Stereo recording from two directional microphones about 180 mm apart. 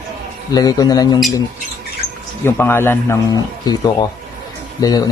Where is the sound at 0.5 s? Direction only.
20° left (ahead or behind).